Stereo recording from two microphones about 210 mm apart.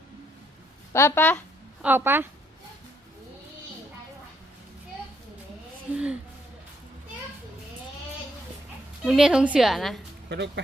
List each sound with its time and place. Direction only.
0.9 s speech: 10° left (ahead or behind)
1.8 s a woman's voice: 10° right (ahead or behind)
5.9 s a sound: 5° right (ahead or behind)
9.0 s a woman's voice: 5° right (ahead or behind)
10.2 s speech: 55° right (ahead or behind)